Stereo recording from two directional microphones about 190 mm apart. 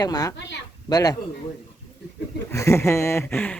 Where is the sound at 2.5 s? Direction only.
15° left (ahead or behind).